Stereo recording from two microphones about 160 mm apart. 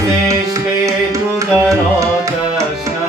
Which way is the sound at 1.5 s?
20° right (ahead or behind).